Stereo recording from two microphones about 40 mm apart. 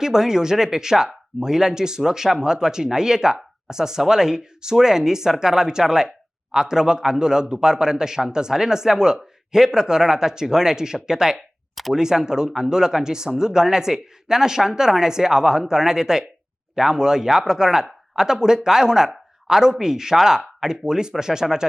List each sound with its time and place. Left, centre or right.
0.0 s speech: centre
11.7 s a sound: centre
11.9 s speech: centre